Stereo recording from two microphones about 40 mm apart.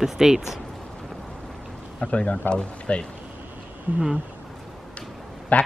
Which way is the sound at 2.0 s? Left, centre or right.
Left.